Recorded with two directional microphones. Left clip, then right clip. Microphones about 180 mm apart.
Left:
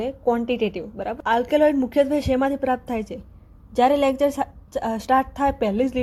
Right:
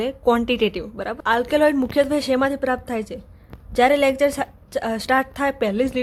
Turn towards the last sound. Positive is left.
turn(degrees=-10)  # may be behind; listen again after turning